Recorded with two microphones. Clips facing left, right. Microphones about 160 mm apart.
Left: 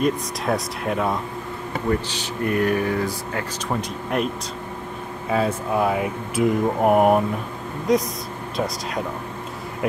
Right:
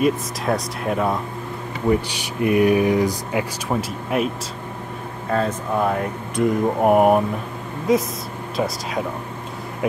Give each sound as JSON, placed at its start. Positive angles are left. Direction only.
{"t": 0.0, "sound": "speech", "side_deg": 0}
{"t": 1.9, "sound": "speech", "side_deg": -10}
{"t": 5.3, "sound": "speech", "side_deg": 5}